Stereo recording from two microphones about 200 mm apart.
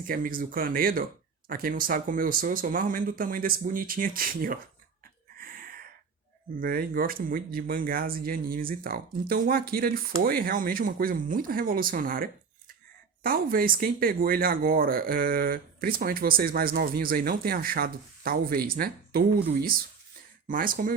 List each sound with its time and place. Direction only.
0.1 s speech: 45° right (ahead or behind)
5.4 s gasp: 45° right (ahead or behind)
6.6 s speech: 45° right (ahead or behind)